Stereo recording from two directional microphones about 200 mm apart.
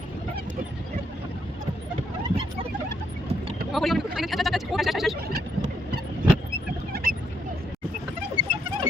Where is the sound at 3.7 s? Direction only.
Centre (ahead or behind).